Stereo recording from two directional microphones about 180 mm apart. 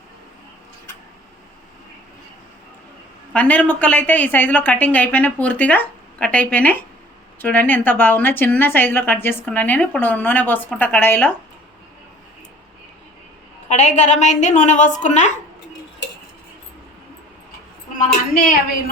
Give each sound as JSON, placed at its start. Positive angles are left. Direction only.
{"t": 3.3, "sound": "speech", "side_deg": 10}
{"t": 13.7, "sound": "a woman's voice", "side_deg": 40}
{"t": 17.9, "sound": "a woman's voice", "side_deg": 50}